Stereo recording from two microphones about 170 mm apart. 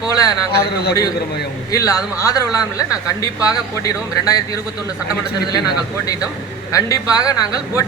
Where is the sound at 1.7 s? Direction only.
20° left (ahead or behind).